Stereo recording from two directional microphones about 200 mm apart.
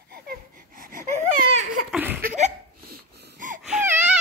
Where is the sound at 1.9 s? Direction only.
10° right (ahead or behind).